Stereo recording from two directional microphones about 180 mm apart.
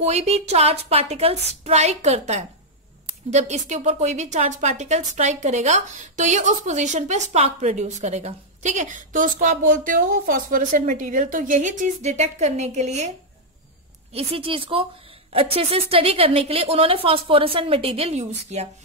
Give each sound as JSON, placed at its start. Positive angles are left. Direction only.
{"t": 0.0, "sound": "a woman's voice", "side_deg": -35}
{"t": 14.1, "sound": "a woman's voice", "side_deg": -30}